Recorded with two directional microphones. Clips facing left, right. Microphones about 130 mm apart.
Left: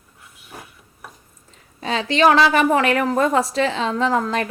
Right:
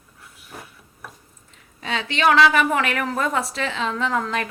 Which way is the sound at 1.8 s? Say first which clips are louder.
Left 6 dB; 35° left (ahead or behind).